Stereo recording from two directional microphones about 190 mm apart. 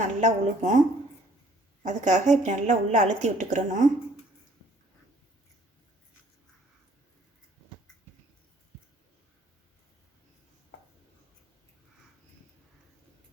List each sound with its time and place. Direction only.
0.0 s a woman's voice: 40° right (ahead or behind)
1.8 s a woman's voice: 40° right (ahead or behind)